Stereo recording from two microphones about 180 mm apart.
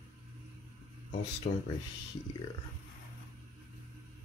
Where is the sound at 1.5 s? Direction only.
60° left (ahead or behind).